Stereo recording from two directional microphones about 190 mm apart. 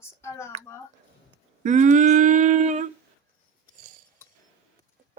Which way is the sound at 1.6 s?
40° right (ahead or behind).